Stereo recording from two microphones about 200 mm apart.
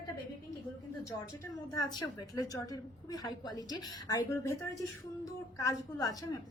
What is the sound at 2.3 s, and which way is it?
A woman's voice, 20° left (ahead or behind).